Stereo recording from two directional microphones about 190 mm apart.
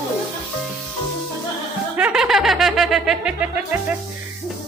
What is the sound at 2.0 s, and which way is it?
Music, 5° right (ahead or behind).